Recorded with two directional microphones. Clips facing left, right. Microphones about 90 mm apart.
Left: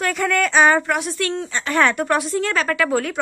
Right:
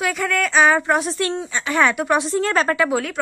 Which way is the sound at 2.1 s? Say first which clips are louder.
Right 2 dB; 30° right (ahead or behind).